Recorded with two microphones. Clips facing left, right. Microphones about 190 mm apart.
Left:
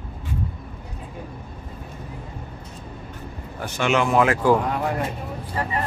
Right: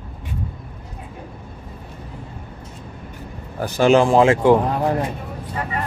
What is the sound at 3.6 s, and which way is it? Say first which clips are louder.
Speech: right 7 dB; 35° right (ahead or behind).